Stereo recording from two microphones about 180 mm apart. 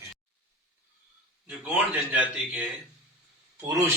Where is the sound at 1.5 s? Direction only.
10° right (ahead or behind).